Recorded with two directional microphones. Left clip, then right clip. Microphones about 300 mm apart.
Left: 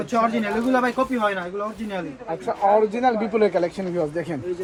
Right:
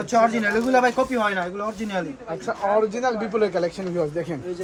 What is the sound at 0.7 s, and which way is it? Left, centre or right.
Speech, centre.